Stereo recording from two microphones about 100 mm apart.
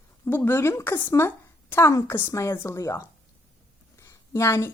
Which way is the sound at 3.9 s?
30° left (ahead or behind).